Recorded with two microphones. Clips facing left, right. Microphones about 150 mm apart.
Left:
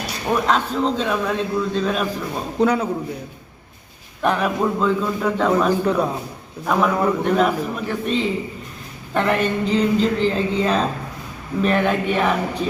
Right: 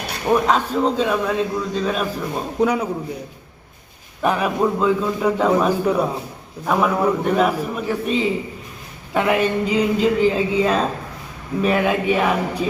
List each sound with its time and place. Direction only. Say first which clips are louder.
0.3 s a man's voice: right 2 dB; 10° right (ahead or behind)
4.2 s a man's voice: right 1 dB; 5° right (ahead or behind)